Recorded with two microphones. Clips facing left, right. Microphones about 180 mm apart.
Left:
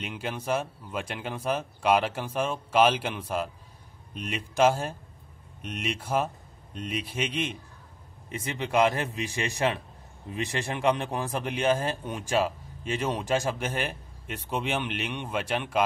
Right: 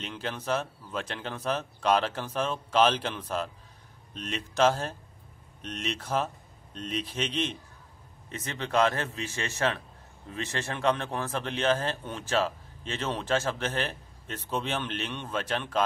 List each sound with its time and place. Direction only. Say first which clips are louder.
0.0 s a man's voice: left 1 dB; 10° left (ahead or behind)